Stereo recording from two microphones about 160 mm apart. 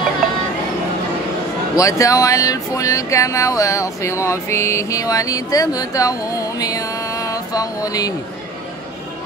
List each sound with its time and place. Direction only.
1.8 s speech: 20° left (ahead or behind)